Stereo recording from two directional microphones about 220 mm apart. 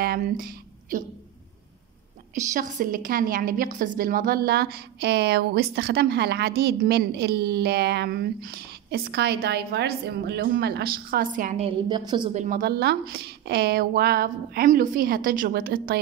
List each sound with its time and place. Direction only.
0.0 s speech: 40° right (ahead or behind)
2.5 s a woman's voice: 40° right (ahead or behind)